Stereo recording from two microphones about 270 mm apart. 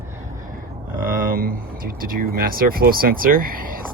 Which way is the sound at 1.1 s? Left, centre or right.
Right.